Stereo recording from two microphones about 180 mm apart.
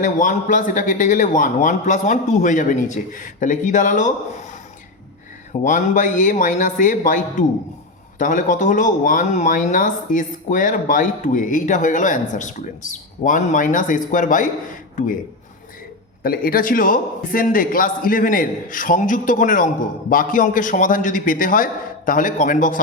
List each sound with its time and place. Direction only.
0.0 s a man's voice: 45° left (ahead or behind)
5.6 s a man's voice: 45° left (ahead or behind)
16.2 s a man's voice: 55° left (ahead or behind)